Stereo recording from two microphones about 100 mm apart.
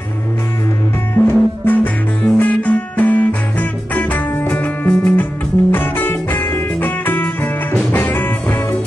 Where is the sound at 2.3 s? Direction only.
15° left (ahead or behind).